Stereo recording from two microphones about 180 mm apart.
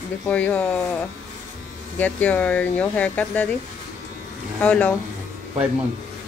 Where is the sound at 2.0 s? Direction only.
10° left (ahead or behind).